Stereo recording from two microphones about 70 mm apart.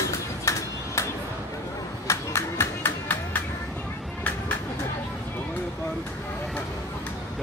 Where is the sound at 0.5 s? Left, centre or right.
Left.